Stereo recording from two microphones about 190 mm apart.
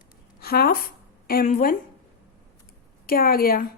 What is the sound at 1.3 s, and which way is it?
Speech, 50° left (ahead or behind).